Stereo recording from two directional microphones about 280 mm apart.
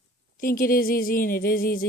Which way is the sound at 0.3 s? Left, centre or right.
Left.